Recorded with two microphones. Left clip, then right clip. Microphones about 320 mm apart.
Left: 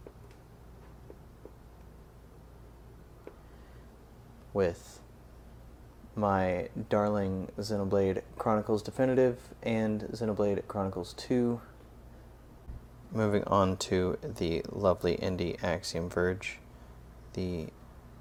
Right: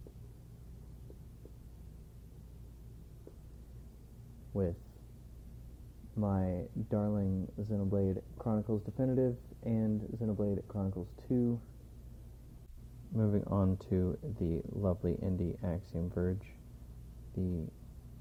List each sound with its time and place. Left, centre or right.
6.1 s speech: centre
13.1 s speech: centre